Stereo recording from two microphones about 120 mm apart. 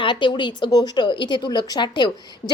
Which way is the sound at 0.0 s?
40° left (ahead or behind).